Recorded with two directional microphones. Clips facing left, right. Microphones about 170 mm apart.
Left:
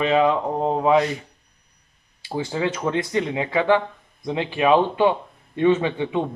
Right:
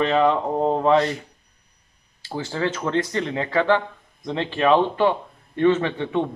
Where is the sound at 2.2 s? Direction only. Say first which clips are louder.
Left 1 dB; 15° left (ahead or behind).